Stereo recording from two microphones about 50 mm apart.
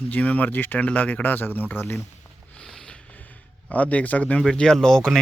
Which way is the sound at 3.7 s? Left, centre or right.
Left.